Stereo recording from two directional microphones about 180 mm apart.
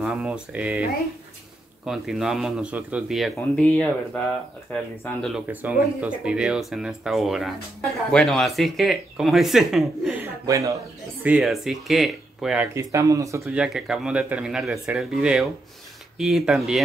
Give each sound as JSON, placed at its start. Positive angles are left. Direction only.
{"t": 0.0, "sound": "a man's voice", "side_deg": 0}
{"t": 1.9, "sound": "a man's voice", "side_deg": -5}
{"t": 5.5, "sound": "a man's voice", "side_deg": -10}
{"t": 10.2, "sound": "a man's voice", "side_deg": -15}
{"t": 11.2, "sound": "a man's voice", "side_deg": -5}
{"t": 12.7, "sound": "speech", "side_deg": -20}
{"t": 13.6, "sound": "a man's voice", "side_deg": -5}